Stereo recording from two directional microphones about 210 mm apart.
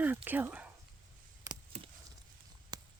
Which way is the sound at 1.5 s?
15° right (ahead or behind).